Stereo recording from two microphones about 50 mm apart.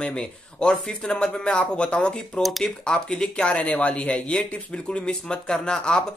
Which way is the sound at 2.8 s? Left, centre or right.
Centre.